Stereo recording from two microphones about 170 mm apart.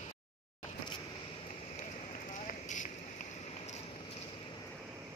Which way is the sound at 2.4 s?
45° left (ahead or behind).